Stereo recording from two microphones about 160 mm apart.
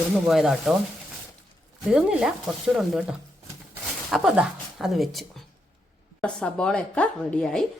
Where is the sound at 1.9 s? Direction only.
5° right (ahead or behind).